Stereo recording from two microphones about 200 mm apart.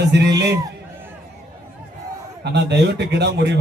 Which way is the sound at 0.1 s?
60° right (ahead or behind).